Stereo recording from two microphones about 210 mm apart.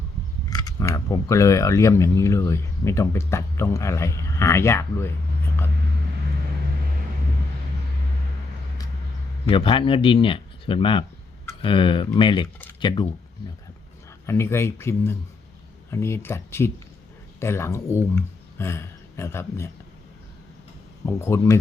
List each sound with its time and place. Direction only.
0.5 s speech: 15° left (ahead or behind)
9.5 s speech: 25° left (ahead or behind)
14.3 s speech: 10° left (ahead or behind)
21.1 s speech: 10° left (ahead or behind)